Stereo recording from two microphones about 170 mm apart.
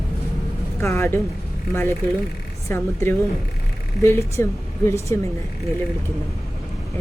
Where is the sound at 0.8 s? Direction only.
15° left (ahead or behind).